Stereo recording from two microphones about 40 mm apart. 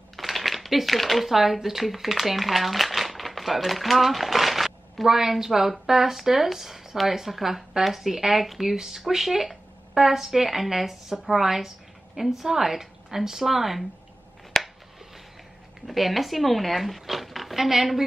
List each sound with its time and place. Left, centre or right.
0.1 s speech: centre
14.5 s a sound: centre
15.9 s speech: centre